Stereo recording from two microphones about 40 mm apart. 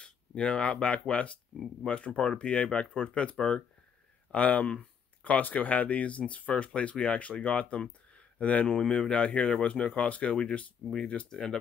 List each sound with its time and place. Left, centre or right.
0.0 s speech: left
2.3 s speech: left
4.3 s speech: left
10.9 s speech: centre